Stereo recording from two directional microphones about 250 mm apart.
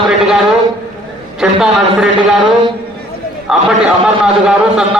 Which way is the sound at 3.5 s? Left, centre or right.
Centre.